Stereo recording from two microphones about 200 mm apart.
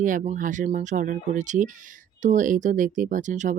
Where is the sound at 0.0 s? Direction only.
40° right (ahead or behind).